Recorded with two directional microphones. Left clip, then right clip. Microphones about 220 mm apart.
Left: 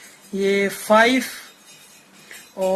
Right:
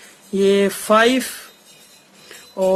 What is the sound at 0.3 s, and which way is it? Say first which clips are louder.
Speech: right 4 dB; 40° right (ahead or behind).